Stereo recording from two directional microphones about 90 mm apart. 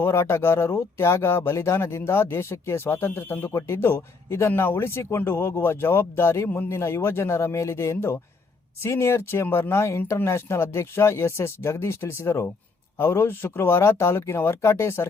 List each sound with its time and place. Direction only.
0.0 s speech: 30° left (ahead or behind)